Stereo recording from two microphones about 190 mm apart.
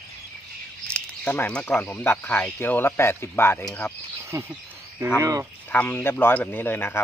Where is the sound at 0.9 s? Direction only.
10° left (ahead or behind).